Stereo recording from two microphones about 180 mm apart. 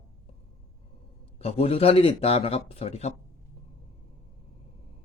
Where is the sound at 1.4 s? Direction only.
35° left (ahead or behind).